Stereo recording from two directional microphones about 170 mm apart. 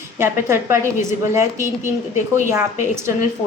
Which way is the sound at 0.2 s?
15° right (ahead or behind).